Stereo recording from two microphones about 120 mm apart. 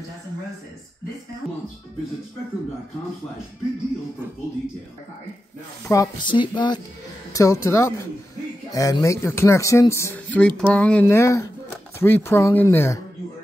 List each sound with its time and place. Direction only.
5.9 s speech: 25° left (ahead or behind)
6.2 s a sound: 40° left (ahead or behind)
7.3 s speech: 25° left (ahead or behind)
11.1 s speech: 25° left (ahead or behind)